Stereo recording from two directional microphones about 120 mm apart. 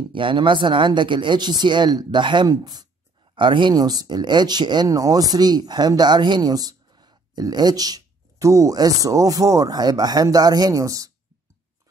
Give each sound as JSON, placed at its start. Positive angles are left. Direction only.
{"t": 0.1, "sound": "speech", "side_deg": -45}